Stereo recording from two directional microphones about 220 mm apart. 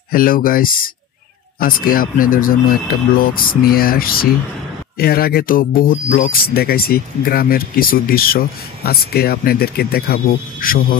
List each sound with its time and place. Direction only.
0.1 s speech: 40° left (ahead or behind)